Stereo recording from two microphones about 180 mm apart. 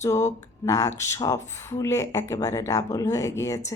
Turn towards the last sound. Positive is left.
turn(degrees=15)  # may be behind; listen again after turning